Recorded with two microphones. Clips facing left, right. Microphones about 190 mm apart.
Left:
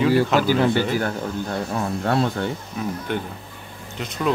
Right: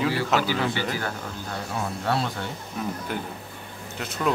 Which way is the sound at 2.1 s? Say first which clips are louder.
Left 5 dB; 50° left (ahead or behind).